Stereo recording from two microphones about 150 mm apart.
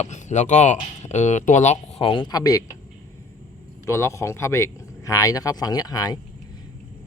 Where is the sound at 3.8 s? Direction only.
20° left (ahead or behind).